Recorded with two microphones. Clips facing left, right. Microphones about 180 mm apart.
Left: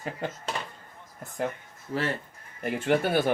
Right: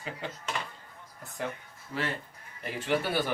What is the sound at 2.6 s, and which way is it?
Speech, 50° left (ahead or behind).